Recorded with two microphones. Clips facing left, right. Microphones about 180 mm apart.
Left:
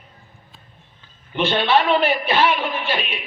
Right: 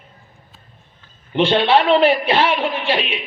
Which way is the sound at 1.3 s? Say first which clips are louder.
Right 4 dB; 30° right (ahead or behind).